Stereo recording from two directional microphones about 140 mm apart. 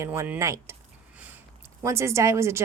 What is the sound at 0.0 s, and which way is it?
Speech, 15° right (ahead or behind).